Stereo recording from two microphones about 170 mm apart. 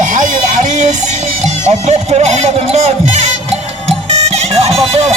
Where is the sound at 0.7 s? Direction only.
45° right (ahead or behind).